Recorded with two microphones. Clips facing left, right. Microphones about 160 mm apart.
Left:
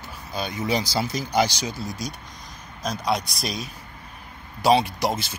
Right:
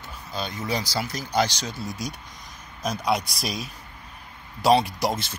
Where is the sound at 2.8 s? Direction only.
5° right (ahead or behind).